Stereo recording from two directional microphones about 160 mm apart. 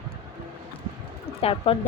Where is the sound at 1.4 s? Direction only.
35° left (ahead or behind).